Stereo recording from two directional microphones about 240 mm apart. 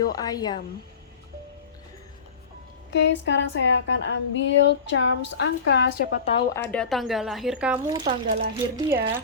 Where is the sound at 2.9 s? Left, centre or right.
Left.